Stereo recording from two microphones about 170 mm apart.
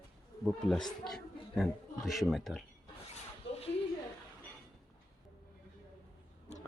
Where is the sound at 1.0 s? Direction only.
Centre (ahead or behind).